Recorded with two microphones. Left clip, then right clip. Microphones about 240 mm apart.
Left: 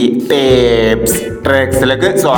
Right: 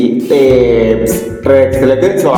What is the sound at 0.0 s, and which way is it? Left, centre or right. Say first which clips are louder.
Mantra: right 2 dB; left.